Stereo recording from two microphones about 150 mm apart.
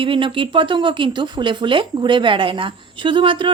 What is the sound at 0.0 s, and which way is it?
Speech, 35° right (ahead or behind).